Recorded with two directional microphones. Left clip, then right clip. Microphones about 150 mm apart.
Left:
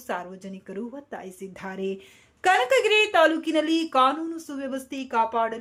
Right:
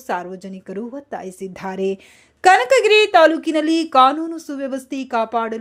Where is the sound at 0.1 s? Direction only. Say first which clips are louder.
Right 7 dB; 35° right (ahead or behind).